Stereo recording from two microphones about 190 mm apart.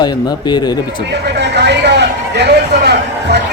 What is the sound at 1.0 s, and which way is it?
Speech, 65° right (ahead or behind).